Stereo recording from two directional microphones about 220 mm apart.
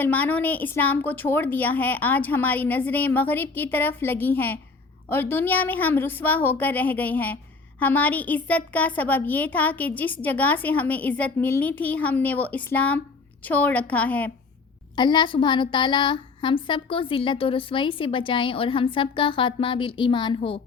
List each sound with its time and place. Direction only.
0.0 s a woman's voice: 5° left (ahead or behind)
14.9 s a woman's voice: 20° left (ahead or behind)